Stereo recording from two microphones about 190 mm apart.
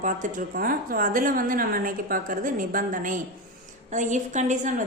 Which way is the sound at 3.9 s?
40° right (ahead or behind).